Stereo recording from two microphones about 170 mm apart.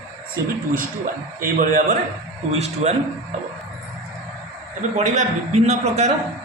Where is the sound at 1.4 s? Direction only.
50° right (ahead or behind).